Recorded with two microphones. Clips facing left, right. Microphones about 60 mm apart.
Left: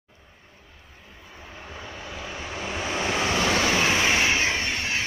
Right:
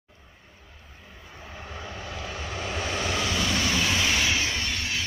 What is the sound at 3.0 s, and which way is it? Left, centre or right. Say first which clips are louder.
Vehicle: left 5 dB; left.